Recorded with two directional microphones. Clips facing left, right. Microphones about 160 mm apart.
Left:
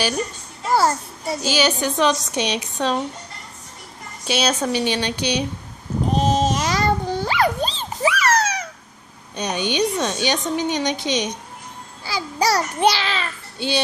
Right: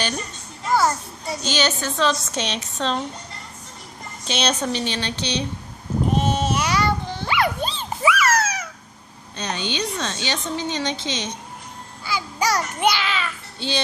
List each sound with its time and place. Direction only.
1.4 s a woman's voice: 10° left (ahead or behind)
4.3 s a woman's voice: 5° left (ahead or behind)
6.1 s dog: 35° left (ahead or behind)
9.3 s a woman's voice: 15° left (ahead or behind)
12.0 s a child's voice: 35° left (ahead or behind)
13.6 s a woman's voice: 15° left (ahead or behind)